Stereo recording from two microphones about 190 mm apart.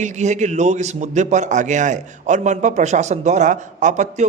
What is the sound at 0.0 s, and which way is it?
A man's voice, 40° right (ahead or behind).